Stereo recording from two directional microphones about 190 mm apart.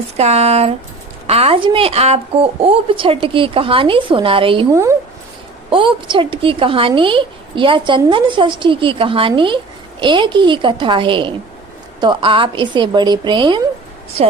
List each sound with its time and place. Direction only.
0.2 s a woman's voice: 35° right (ahead or behind)
4.7 s speech: 15° right (ahead or behind)
5.7 s a woman's voice: 25° right (ahead or behind)